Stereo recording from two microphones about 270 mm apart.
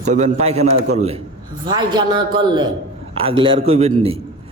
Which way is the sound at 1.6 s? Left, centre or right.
Centre.